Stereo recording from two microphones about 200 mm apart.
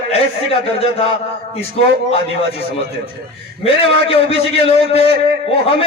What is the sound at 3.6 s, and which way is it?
A man's voice, 30° left (ahead or behind).